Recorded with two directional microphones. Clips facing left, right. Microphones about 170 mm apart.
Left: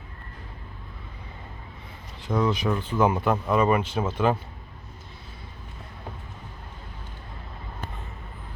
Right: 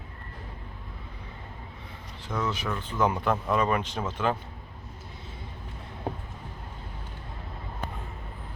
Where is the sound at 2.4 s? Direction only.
15° left (ahead or behind).